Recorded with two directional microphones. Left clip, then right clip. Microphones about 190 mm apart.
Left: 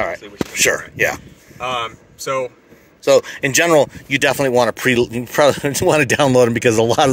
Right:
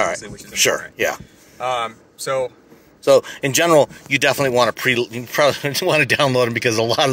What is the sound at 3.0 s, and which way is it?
Speech, 5° left (ahead or behind).